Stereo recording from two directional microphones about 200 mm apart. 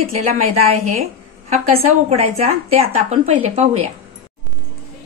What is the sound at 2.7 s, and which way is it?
Speech, 30° right (ahead or behind).